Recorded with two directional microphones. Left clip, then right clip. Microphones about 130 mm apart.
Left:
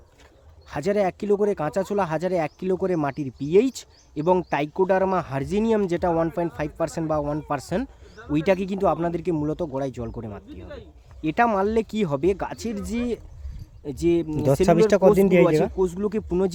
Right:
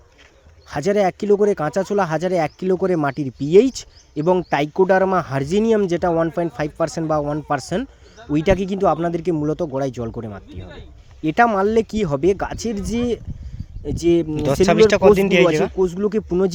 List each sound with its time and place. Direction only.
0.7 s speech: 35° right (ahead or behind)
14.3 s speech: 35° left (ahead or behind)
15.8 s speech: 25° right (ahead or behind)